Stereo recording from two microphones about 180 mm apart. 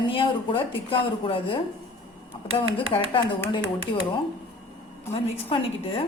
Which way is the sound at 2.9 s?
35° left (ahead or behind).